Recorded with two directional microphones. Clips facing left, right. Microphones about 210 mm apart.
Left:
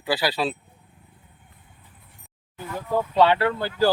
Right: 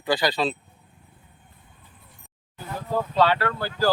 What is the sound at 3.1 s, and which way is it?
Speech, 20° left (ahead or behind).